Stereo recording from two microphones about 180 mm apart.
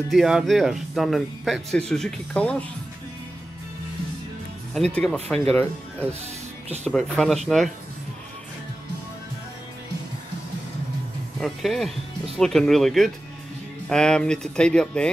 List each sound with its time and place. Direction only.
0.1 s speech: centre (ahead or behind)
4.7 s speech: 5° left (ahead or behind)
6.8 s speech: 5° left (ahead or behind)
11.4 s speech: centre (ahead or behind)